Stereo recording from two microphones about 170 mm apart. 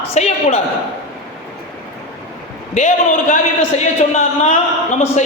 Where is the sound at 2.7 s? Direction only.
45° left (ahead or behind).